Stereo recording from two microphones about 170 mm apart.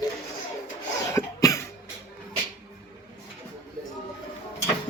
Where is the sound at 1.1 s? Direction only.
20° left (ahead or behind).